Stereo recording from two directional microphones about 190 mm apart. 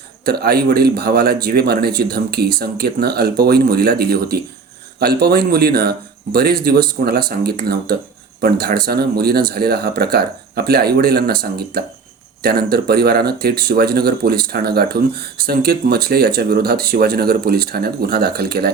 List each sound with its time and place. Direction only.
0.3 s a man's voice: 55° right (ahead or behind)